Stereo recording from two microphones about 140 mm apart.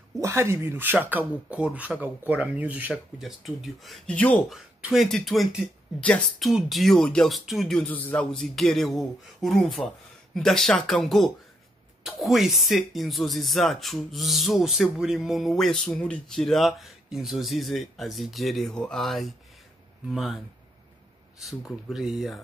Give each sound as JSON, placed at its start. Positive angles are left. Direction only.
{"t": 0.2, "sound": "speech", "side_deg": -20}
{"t": 4.5, "sound": "speech", "side_deg": 0}
{"t": 21.4, "sound": "speech", "side_deg": 0}